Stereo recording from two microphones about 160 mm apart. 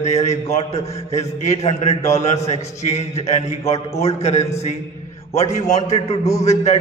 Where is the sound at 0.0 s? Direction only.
45° left (ahead or behind).